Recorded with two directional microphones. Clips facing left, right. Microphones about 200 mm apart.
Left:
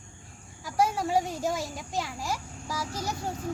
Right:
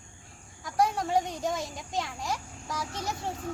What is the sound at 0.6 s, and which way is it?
A child's voice, 5° left (ahead or behind).